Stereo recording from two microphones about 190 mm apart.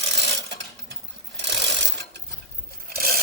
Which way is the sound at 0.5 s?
65° right (ahead or behind).